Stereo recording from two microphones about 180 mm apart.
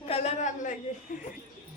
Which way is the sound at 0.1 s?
35° left (ahead or behind).